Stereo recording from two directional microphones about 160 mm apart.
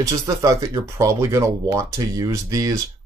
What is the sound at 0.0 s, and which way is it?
Speech, 20° right (ahead or behind).